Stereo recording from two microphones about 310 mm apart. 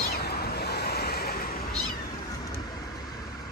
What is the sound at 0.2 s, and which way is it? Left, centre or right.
Waves, left.